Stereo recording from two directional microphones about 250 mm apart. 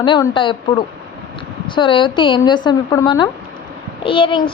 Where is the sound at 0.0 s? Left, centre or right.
Centre.